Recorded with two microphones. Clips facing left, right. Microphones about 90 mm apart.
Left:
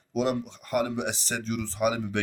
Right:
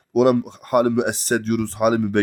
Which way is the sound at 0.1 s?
60° right (ahead or behind).